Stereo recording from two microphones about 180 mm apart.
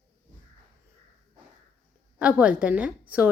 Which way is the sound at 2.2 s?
5° right (ahead or behind).